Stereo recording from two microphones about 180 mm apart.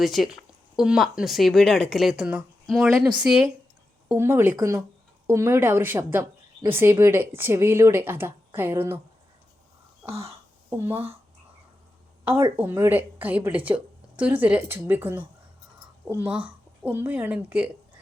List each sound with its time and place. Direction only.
0.0 s speech: centre (ahead or behind)
10.9 s speech: 30° right (ahead or behind)
12.5 s speech: 10° right (ahead or behind)